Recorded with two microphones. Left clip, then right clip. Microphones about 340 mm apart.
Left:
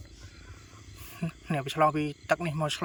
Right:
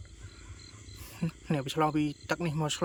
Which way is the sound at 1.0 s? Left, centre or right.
Centre.